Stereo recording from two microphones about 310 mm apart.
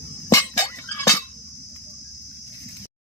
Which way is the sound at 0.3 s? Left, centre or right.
Centre.